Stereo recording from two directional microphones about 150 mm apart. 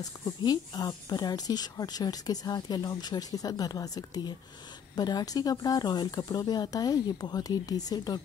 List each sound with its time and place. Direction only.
0.0 s speech: 25° left (ahead or behind)